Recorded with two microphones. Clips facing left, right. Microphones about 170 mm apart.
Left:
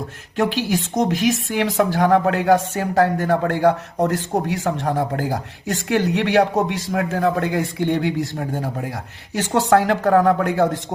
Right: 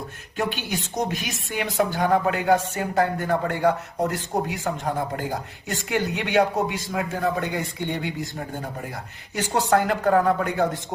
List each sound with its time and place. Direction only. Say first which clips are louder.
0.3 s a woman's voice: left 7 dB; 90° left